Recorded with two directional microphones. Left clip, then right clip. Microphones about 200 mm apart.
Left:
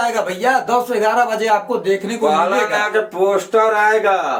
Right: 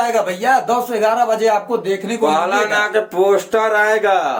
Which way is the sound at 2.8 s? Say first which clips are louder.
Right 1 dB; 50° right (ahead or behind).